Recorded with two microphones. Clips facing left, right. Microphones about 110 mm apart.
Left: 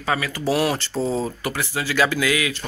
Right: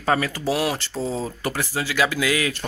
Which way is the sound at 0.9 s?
15° left (ahead or behind).